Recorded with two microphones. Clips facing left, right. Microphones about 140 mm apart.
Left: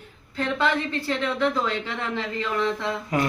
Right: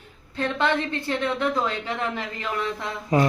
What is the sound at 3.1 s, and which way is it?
Speech, 25° right (ahead or behind).